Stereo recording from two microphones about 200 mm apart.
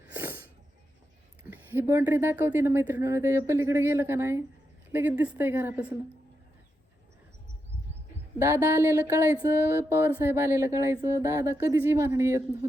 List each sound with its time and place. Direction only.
0.1 s snort: 10° right (ahead or behind)
1.5 s a woman's voice: 10° right (ahead or behind)
8.8 s a woman's voice: 15° right (ahead or behind)